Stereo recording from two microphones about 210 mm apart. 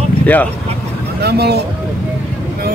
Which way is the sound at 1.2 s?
50° right (ahead or behind).